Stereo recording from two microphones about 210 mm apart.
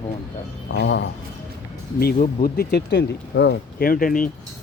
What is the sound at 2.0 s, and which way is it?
Speech, 40° left (ahead or behind).